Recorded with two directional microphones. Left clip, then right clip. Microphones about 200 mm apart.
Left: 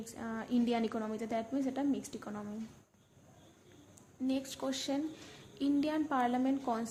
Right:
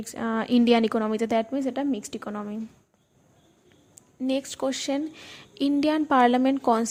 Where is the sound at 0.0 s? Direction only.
45° right (ahead or behind).